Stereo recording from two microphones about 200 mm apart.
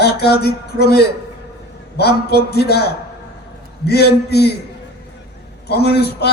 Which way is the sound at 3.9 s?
55° left (ahead or behind).